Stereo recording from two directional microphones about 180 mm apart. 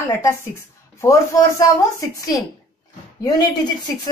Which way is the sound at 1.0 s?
15° left (ahead or behind).